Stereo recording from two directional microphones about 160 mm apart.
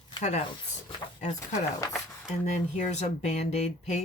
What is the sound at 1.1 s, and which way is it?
Speech, 45° left (ahead or behind).